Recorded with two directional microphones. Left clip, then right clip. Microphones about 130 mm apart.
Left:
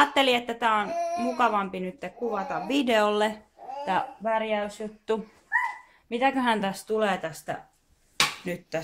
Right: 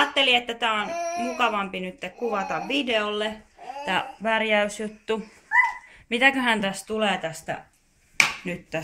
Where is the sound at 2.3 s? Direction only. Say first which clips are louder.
Right 4 dB; 10° left (ahead or behind).